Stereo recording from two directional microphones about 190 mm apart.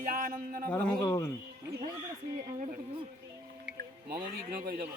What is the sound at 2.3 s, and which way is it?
Speech, 40° right (ahead or behind).